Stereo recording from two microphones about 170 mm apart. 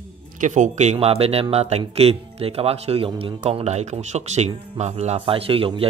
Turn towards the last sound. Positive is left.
turn(degrees=-30)  # may be behind; listen again after turning